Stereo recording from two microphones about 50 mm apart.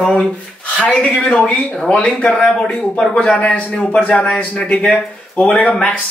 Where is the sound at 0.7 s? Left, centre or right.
Left.